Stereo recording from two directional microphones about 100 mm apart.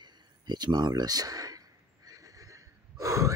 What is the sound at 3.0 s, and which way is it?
Gasp, 30° right (ahead or behind).